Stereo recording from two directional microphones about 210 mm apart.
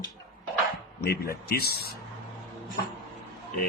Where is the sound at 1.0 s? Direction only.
50° left (ahead or behind).